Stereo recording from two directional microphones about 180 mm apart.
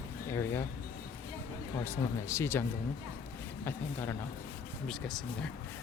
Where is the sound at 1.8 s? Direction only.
15° left (ahead or behind).